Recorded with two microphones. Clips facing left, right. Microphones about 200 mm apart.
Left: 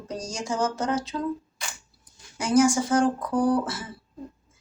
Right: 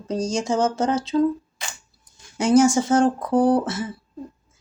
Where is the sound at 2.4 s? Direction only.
25° right (ahead or behind).